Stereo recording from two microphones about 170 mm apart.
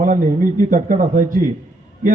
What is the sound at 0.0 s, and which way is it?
A man's voice, 50° right (ahead or behind).